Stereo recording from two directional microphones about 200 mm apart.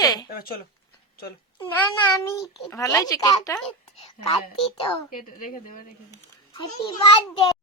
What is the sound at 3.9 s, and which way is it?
A woman's voice, 30° left (ahead or behind).